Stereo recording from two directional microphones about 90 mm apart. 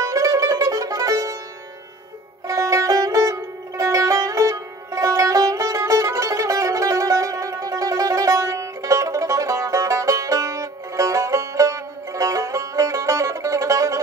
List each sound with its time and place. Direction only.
0.0 s music: 40° right (ahead or behind)
2.4 s music: 35° right (ahead or behind)